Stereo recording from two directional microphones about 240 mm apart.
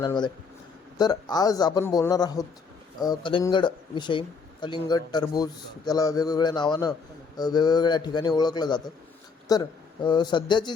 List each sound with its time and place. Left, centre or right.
0.0 s a man's voice: centre